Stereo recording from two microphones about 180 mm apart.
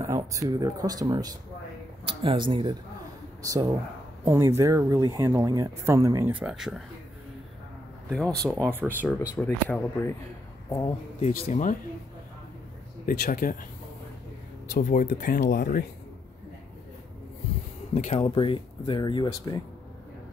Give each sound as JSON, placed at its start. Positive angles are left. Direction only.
{"t": 0.0, "sound": "speech", "side_deg": -15}
{"t": 6.3, "sound": "speech", "side_deg": -5}
{"t": 8.1, "sound": "speech", "side_deg": 5}
{"t": 8.5, "sound": "speech", "side_deg": -10}
{"t": 9.4, "sound": "speech", "side_deg": 10}
{"t": 11.1, "sound": "speech", "side_deg": 40}
{"t": 13.0, "sound": "speech", "side_deg": 55}
{"t": 14.7, "sound": "speech", "side_deg": 50}
{"t": 17.9, "sound": "speech", "side_deg": 40}